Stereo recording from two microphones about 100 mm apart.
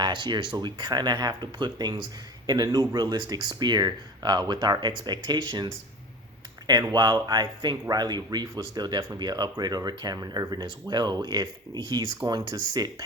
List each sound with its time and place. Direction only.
0.0 s speech: 50° right (ahead or behind)
6.9 s speech: 50° right (ahead or behind)